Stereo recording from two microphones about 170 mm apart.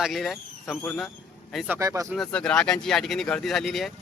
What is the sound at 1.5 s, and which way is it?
Speech, 10° right (ahead or behind).